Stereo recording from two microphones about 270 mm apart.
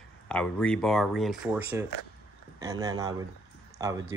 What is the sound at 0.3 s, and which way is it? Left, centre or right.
Speech, centre.